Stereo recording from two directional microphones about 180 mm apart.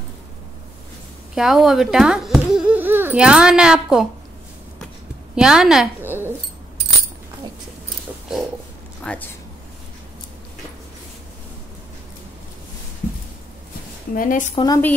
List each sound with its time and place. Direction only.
1.3 s speech: 5° right (ahead or behind)
5.3 s a sound: 5° right (ahead or behind)
9.0 s speech: 5° left (ahead or behind)
14.1 s a woman's voice: 50° left (ahead or behind)
14.5 s a woman's voice: 25° left (ahead or behind)